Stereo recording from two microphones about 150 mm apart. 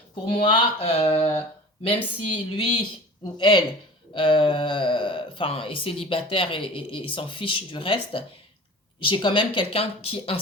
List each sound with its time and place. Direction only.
0.3 s speech: 35° left (ahead or behind)